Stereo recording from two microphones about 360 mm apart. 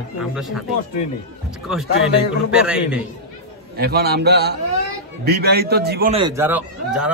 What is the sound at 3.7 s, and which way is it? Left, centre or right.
A man's voice, right.